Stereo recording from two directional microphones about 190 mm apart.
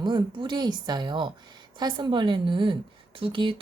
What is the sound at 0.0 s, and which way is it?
Speech, 25° right (ahead or behind).